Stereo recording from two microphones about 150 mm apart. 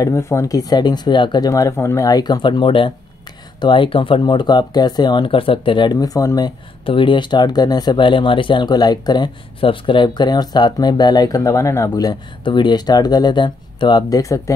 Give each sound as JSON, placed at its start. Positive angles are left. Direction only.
{"t": 0.0, "sound": "speech", "side_deg": 20}